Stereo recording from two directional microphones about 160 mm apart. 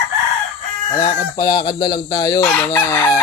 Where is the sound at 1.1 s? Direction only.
25° left (ahead or behind).